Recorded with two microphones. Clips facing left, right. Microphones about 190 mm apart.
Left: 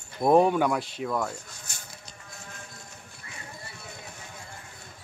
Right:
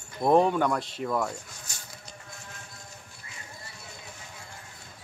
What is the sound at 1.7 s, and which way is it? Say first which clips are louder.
Patter: even; 55° left (ahead or behind).